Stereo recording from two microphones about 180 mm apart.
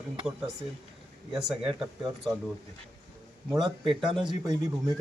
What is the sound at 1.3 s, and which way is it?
Speech, centre (ahead or behind).